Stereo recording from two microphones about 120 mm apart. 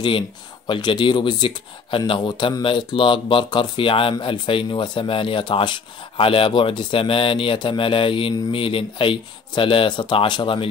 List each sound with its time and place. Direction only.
0.7 s speech: 40° left (ahead or behind)